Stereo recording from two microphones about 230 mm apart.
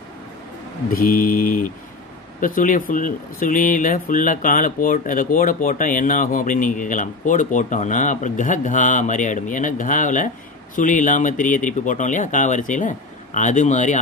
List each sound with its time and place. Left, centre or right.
0.8 s speech: left